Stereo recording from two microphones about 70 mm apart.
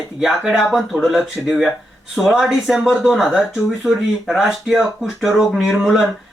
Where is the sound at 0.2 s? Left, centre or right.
Centre.